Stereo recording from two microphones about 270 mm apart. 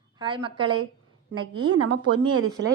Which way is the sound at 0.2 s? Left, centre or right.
Centre.